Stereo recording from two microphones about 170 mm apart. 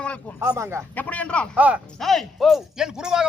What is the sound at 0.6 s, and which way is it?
Speech, 15° right (ahead or behind).